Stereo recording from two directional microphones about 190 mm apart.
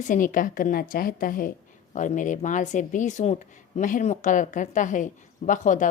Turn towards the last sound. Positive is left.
turn(degrees=40)  # may be behind; listen again after turning